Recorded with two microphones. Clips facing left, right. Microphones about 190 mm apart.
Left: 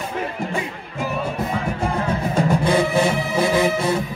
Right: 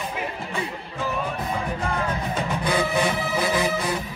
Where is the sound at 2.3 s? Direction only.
30° left (ahead or behind).